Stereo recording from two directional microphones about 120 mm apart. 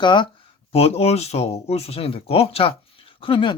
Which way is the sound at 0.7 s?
55° left (ahead or behind).